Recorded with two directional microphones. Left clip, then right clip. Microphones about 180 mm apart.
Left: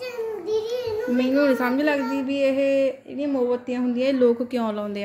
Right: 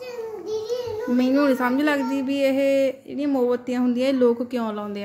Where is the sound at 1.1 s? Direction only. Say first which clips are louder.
Right 1 dB; 15° right (ahead or behind).